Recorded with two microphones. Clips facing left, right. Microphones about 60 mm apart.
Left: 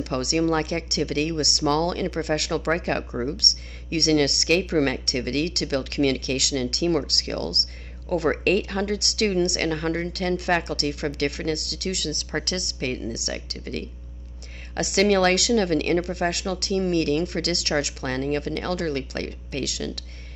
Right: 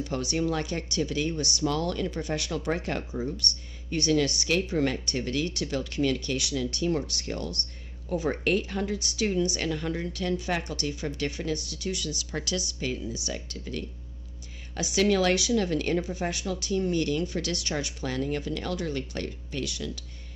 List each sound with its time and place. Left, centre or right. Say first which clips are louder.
0.0 s speech: left 5 dB; left